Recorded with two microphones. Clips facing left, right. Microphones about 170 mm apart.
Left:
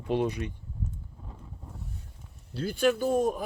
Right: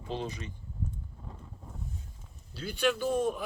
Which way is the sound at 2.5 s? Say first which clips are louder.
Left 4 dB; 50° left (ahead or behind).